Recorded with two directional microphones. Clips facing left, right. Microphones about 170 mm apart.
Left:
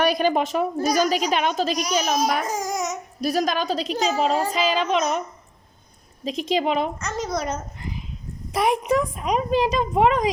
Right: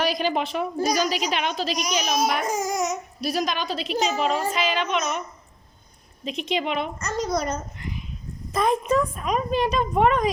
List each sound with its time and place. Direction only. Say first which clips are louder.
0.0 s speech: left 4 dB; 50° left (ahead or behind)
2.5 s a child's voice: right 1 dB; 5° right (ahead or behind)
3.2 s a woman's voice: left 5 dB; 45° left (ahead or behind)
6.2 s a woman's voice: left 4 dB; 35° left (ahead or behind)
7.0 s a child's voice: right 1 dB; 5° left (ahead or behind)